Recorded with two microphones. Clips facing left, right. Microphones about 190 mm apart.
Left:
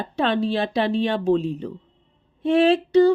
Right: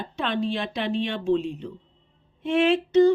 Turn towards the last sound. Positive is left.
turn(degrees=35)  # may be behind; listen again after turning